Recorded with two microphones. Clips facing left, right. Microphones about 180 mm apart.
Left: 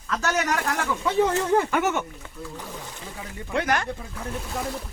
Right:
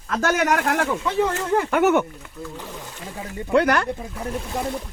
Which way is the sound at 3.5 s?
65° right (ahead or behind).